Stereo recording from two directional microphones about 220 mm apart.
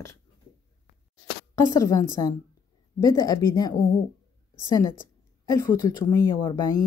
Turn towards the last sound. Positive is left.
turn(degrees=15)  # may be behind; listen again after turning